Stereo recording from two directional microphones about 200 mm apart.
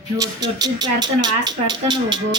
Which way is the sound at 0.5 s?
20° right (ahead or behind).